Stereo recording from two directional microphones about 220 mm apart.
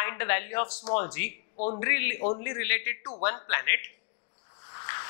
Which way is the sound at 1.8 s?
15° left (ahead or behind).